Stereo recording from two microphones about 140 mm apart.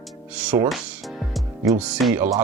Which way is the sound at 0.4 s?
10° right (ahead or behind).